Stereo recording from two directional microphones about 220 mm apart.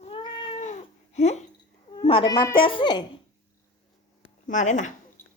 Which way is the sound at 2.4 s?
20° left (ahead or behind).